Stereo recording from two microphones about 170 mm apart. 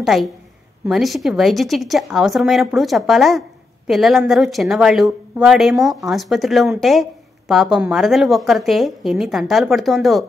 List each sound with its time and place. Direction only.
0.0 s a woman's voice: centre (ahead or behind)